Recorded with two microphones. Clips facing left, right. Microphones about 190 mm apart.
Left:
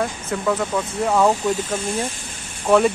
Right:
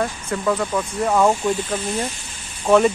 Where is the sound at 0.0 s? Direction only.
Centre (ahead or behind).